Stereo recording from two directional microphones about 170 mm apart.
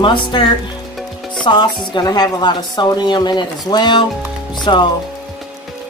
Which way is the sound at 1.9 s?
25° left (ahead or behind).